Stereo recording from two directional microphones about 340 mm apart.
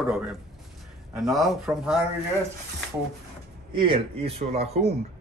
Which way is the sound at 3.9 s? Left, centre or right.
Centre.